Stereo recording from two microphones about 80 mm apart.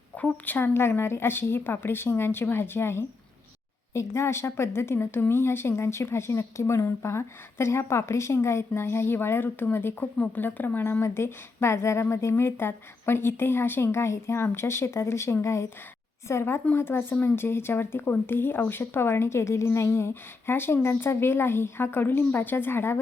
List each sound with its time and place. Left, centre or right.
0.2 s speech: left